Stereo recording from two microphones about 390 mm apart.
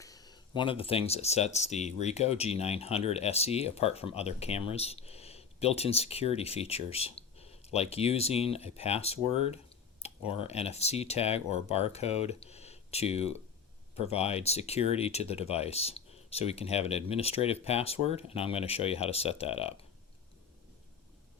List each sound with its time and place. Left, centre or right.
0.0 s speech: centre